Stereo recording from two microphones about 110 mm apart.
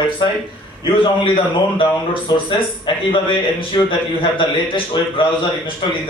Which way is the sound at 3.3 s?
50° left (ahead or behind).